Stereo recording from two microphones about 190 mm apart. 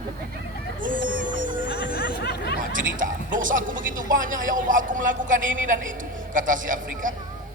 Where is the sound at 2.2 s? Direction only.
60° left (ahead or behind).